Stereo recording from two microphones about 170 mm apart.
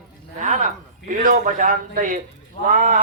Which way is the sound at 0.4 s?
45° right (ahead or behind).